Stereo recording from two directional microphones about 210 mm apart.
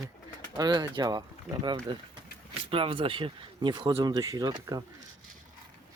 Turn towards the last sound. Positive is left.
turn(degrees=-20)  # may be behind; listen again after turning